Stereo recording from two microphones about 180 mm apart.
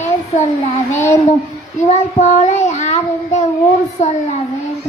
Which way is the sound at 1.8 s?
40° left (ahead or behind).